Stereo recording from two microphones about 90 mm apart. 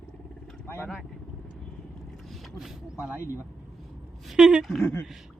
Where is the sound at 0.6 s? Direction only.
25° left (ahead or behind).